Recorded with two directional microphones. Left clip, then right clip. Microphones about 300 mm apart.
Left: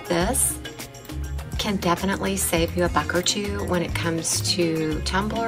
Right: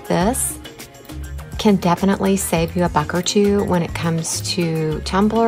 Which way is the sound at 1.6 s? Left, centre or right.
Centre.